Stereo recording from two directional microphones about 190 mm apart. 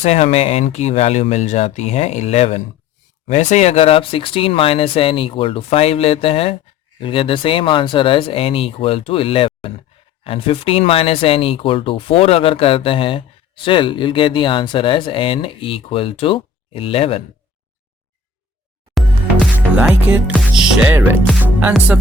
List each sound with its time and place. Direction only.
0.0 s speech: 35° left (ahead or behind)
19.7 s speech: 10° right (ahead or behind)